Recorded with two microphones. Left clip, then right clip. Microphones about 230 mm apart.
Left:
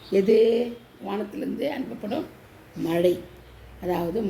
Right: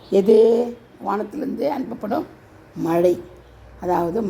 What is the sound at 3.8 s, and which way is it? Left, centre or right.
Speech, right.